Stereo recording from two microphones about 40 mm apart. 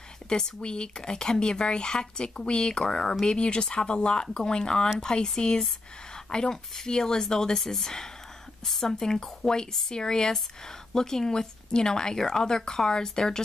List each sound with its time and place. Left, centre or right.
0.3 s a woman's voice: left